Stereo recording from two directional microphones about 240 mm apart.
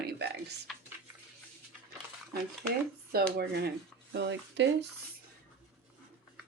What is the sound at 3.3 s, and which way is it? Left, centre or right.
Speech, right.